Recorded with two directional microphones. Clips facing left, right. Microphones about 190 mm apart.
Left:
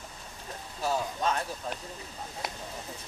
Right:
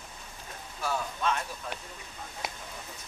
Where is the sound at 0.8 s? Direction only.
35° left (ahead or behind).